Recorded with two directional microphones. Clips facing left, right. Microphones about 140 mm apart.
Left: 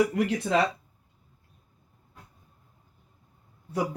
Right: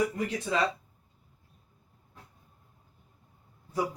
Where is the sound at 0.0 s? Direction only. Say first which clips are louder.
Left 5 dB; 75° left (ahead or behind).